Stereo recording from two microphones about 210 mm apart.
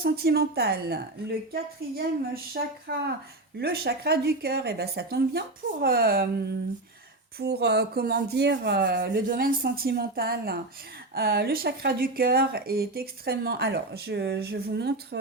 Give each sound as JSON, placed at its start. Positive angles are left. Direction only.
{"t": 0.0, "sound": "speech", "side_deg": -45}
{"t": 7.3, "sound": "speech", "side_deg": -50}